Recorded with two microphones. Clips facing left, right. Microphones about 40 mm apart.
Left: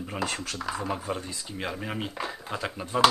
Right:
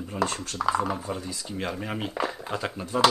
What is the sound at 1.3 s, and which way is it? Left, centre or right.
Speech, centre.